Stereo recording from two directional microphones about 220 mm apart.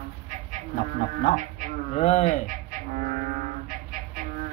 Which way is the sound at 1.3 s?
35° left (ahead or behind).